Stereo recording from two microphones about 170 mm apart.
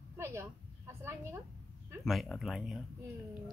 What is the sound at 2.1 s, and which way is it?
Speech, centre (ahead or behind).